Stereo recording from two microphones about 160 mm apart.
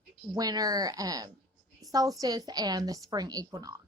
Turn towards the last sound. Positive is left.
turn(degrees=-20)  # may be behind; listen again after turning